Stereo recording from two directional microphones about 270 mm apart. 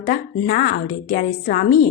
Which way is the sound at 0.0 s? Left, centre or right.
Left.